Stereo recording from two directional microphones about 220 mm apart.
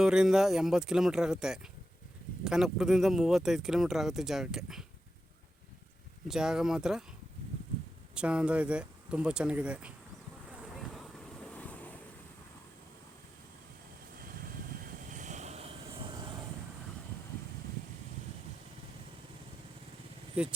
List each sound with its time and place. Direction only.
0.0 s speech: 5° right (ahead or behind)
6.2 s speech: centre (ahead or behind)
8.1 s speech: 5° right (ahead or behind)
10.8 s vehicle: centre (ahead or behind)
15.1 s vehicle: 35° right (ahead or behind)